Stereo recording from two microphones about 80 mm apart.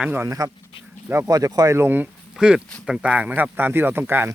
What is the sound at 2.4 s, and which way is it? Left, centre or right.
Speech, centre.